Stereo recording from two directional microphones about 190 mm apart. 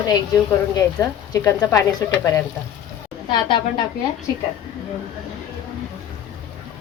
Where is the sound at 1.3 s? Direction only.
15° left (ahead or behind).